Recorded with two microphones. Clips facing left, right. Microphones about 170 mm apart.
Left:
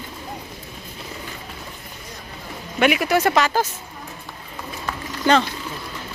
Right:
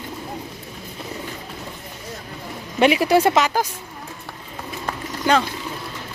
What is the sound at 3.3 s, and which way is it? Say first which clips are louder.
Speech: right 1 dB; 15° right (ahead or behind).